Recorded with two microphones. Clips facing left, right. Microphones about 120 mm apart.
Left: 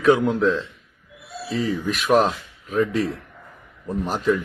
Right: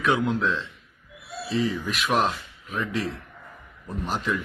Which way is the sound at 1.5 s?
40° left (ahead or behind).